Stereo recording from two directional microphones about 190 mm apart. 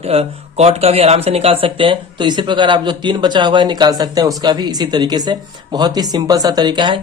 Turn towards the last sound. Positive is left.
turn(degrees=-25)  # may be behind; listen again after turning